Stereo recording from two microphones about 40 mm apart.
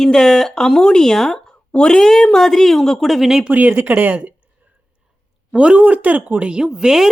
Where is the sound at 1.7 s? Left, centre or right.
Left.